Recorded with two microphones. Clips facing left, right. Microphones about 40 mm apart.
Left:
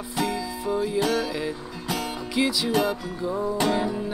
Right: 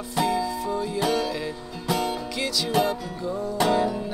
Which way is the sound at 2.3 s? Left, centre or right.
Centre.